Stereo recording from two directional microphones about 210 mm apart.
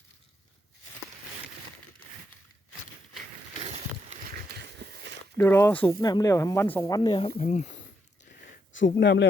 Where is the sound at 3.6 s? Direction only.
30° right (ahead or behind).